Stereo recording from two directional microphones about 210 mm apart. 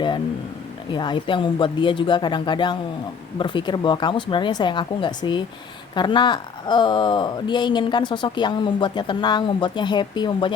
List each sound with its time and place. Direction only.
0.9 s speech: 20° left (ahead or behind)